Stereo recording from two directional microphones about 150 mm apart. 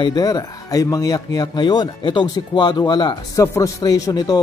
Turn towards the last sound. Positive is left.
turn(degrees=25)  # may be behind; listen again after turning